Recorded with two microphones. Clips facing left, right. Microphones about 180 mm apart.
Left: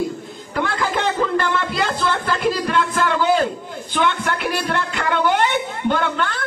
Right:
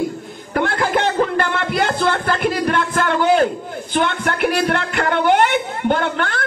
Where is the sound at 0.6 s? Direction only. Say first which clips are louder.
Right 4 dB; 60° right (ahead or behind).